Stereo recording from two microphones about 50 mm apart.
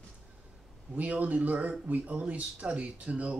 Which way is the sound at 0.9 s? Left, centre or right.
Right.